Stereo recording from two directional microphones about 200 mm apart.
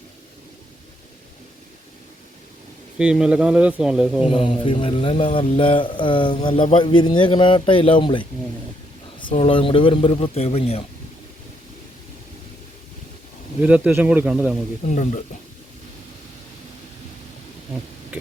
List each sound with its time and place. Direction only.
3.0 s speech: 5° right (ahead or behind)
4.4 s mantra: 25° left (ahead or behind)
13.6 s speech: 5° right (ahead or behind)
14.8 s speech: 35° left (ahead or behind)